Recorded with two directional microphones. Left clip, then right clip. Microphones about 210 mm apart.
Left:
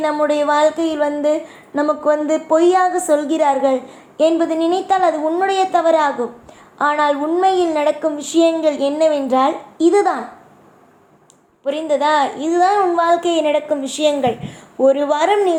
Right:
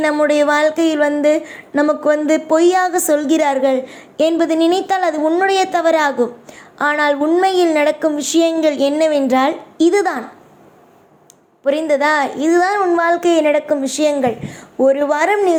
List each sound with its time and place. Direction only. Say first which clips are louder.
0.0 s speech: right 3 dB; 30° right (ahead or behind)
11.6 s speech: right 2 dB; 25° right (ahead or behind)